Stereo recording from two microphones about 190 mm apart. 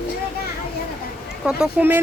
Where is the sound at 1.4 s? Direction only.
5° right (ahead or behind).